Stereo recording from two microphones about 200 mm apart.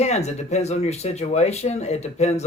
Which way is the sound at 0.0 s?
35° left (ahead or behind).